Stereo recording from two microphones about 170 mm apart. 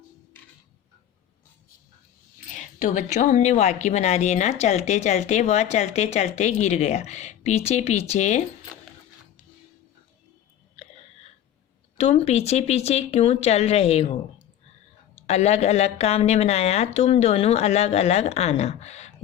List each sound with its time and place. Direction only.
2.5 s a woman's voice: 50° left (ahead or behind)
11.9 s a woman's voice: 40° left (ahead or behind)
15.3 s a woman's voice: 40° left (ahead or behind)